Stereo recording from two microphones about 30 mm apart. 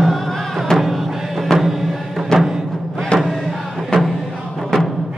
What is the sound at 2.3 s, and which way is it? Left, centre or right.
Music, left.